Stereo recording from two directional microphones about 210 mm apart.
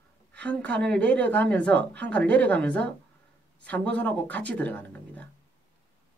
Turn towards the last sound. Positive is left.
turn(degrees=5)  # may be behind; listen again after turning